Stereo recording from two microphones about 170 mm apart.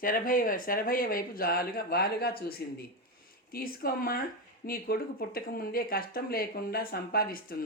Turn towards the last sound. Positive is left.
turn(degrees=60)  # may be behind; listen again after turning